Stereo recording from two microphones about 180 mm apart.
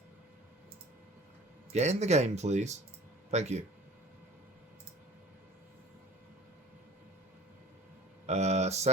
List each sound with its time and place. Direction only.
1.7 s speech: 40° right (ahead or behind)
8.3 s speech: 40° right (ahead or behind)